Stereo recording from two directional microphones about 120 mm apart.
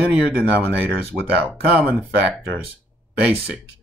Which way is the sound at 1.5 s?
15° right (ahead or behind).